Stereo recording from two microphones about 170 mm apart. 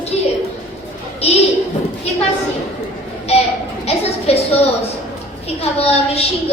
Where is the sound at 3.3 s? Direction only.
40° left (ahead or behind).